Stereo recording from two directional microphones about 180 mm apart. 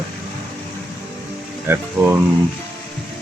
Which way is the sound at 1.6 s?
10° right (ahead or behind).